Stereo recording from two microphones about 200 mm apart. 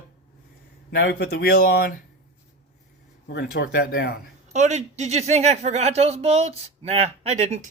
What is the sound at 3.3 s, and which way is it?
Speech, 60° left (ahead or behind).